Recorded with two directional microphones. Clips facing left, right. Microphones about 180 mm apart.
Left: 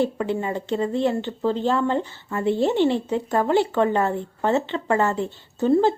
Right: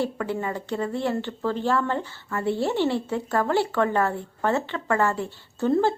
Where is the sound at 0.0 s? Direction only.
20° left (ahead or behind).